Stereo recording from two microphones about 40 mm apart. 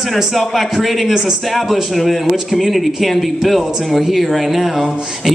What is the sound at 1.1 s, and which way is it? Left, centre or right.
Speech, centre.